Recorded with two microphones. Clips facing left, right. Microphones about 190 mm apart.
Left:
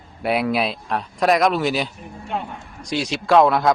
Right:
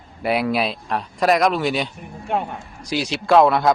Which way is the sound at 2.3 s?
55° right (ahead or behind).